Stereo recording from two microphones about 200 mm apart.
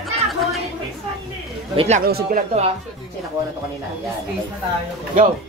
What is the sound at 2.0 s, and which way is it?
Speech, 45° right (ahead or behind).